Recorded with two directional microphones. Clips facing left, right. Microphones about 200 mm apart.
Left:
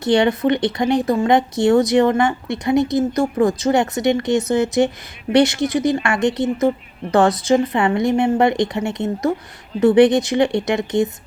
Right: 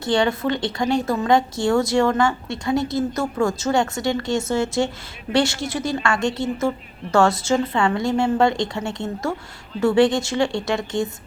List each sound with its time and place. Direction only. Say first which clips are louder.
0.0 s speech: left 4 dB; 20° left (ahead or behind)